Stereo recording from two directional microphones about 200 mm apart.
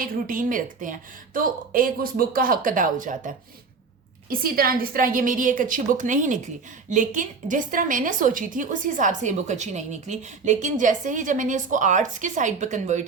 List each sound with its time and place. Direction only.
0.0 s a woman's voice: 45° right (ahead or behind)